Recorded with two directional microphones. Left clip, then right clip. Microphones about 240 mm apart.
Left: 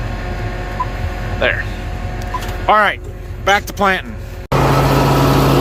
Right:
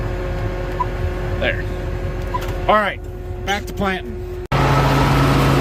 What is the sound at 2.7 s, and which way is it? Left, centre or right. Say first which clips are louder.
Speech: left 4 dB; centre.